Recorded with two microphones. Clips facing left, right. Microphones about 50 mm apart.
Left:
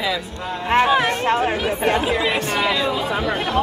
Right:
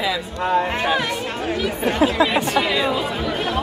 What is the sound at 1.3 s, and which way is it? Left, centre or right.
Speech, left.